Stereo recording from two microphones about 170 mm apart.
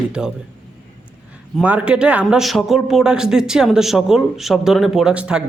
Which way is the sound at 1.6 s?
10° right (ahead or behind).